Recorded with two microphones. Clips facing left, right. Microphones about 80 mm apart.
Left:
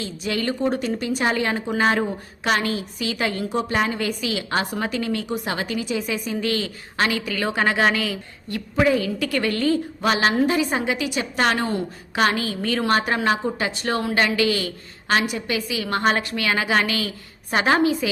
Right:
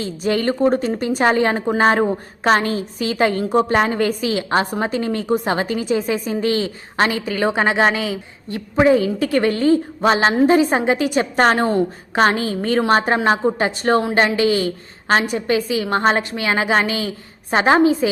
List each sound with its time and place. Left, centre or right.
0.0 s a woman's voice: right